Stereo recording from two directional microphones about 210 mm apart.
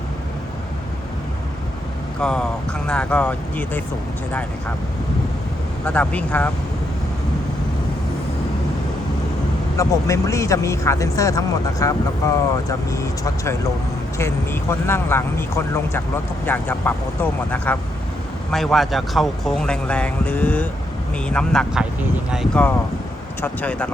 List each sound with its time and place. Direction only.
2.2 s speech: 5° left (ahead or behind)
5.8 s speech: 5° left (ahead or behind)
9.7 s speech: 15° left (ahead or behind)